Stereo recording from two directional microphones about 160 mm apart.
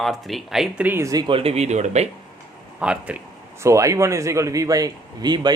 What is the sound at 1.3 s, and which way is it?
Speech, 35° right (ahead or behind).